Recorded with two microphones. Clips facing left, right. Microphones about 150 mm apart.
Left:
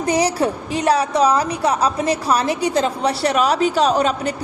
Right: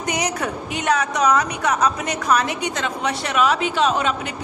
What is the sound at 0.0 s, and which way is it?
A woman's voice, 30° left (ahead or behind).